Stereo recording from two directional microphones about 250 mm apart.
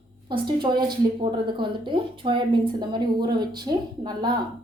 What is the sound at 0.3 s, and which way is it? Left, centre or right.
A woman's voice, centre.